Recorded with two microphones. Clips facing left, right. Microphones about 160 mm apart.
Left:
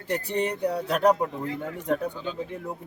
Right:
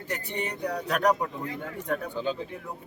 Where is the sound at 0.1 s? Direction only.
35° left (ahead or behind).